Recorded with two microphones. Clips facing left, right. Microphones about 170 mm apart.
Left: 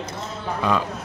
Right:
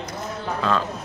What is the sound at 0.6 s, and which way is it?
Speech, 15° left (ahead or behind).